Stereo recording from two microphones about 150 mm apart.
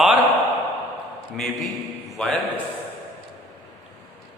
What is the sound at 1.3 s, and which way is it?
A man's voice, centre (ahead or behind).